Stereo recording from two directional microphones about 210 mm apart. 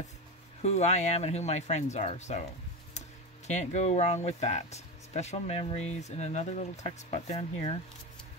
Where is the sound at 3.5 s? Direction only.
35° left (ahead or behind).